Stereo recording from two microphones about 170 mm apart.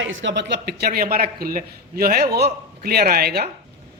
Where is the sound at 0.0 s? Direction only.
90° right.